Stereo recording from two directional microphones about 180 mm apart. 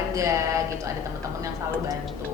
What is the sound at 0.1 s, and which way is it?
Speech, 20° right (ahead or behind).